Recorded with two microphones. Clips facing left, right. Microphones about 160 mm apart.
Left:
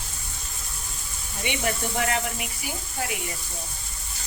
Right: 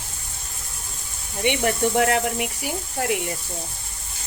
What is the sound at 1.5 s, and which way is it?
Speech, 55° right (ahead or behind).